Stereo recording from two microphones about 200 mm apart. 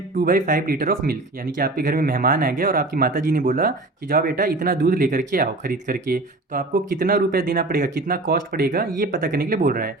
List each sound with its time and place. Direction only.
0.2 s speech: 45° right (ahead or behind)